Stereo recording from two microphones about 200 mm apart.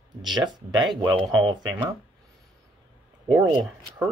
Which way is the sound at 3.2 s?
20° right (ahead or behind).